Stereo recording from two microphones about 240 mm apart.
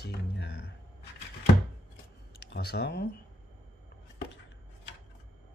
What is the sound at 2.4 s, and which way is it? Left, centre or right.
Speech, left.